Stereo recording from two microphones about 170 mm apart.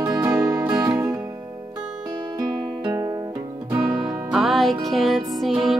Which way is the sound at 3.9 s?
5° right (ahead or behind).